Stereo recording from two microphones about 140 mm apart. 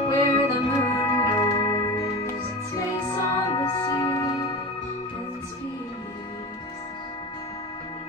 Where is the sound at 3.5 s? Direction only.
25° left (ahead or behind).